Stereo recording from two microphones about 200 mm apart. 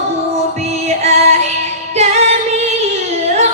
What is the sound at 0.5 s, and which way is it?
Music, 30° right (ahead or behind).